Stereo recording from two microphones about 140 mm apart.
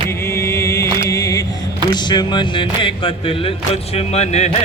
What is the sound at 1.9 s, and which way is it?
Speech, 30° left (ahead or behind).